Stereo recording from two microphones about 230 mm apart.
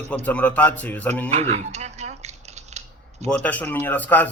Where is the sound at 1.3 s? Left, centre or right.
Right.